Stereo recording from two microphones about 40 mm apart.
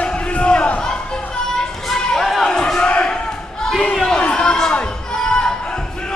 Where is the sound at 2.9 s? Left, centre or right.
Left.